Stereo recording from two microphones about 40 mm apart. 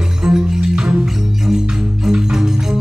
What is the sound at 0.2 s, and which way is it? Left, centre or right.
Music, centre.